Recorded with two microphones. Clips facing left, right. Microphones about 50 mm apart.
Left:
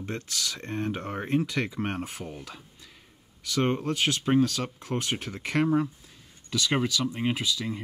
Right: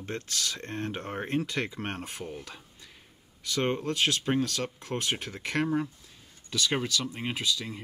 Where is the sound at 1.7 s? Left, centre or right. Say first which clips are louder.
Left 4 dB; centre.